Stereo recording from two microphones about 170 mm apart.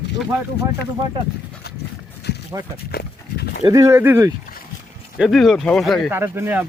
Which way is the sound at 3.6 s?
20° right (ahead or behind).